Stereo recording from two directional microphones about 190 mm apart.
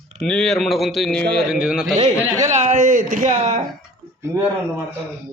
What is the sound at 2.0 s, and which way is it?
Speech, 20° right (ahead or behind).